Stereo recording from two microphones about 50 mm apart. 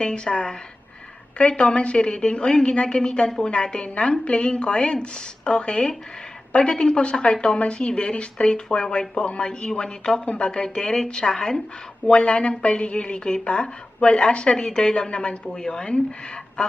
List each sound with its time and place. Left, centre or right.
0.0 s a woman's voice: centre